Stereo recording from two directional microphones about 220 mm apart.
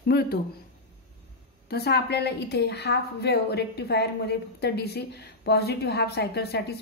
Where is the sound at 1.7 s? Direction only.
45° left (ahead or behind).